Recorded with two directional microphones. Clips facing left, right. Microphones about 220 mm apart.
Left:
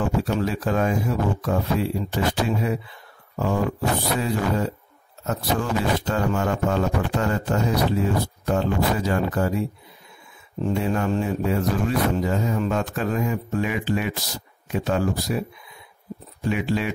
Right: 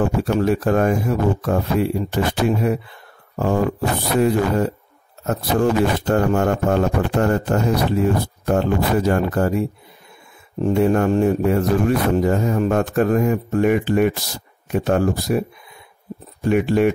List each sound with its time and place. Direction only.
0.0 s speech: 55° right (ahead or behind)
16.4 s speech: 55° right (ahead or behind)